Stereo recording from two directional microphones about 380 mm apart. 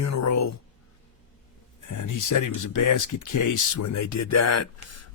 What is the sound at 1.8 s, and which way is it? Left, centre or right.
Speech, left.